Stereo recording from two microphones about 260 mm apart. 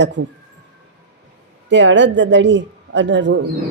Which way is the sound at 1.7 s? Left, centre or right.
Right.